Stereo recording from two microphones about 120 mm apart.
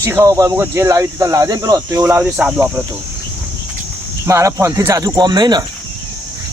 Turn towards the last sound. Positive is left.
turn(degrees=-35)  # may be behind; listen again after turning